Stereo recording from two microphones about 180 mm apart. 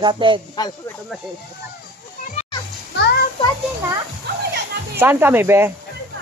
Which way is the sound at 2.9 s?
70° left (ahead or behind).